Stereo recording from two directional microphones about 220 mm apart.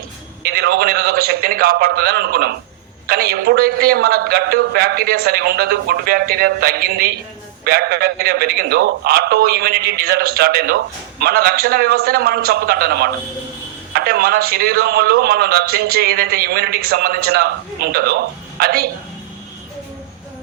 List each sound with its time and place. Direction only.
0.4 s a woman's voice: 45° right (ahead or behind)